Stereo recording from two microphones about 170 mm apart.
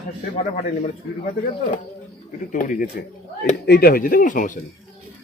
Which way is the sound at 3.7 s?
60° left (ahead or behind).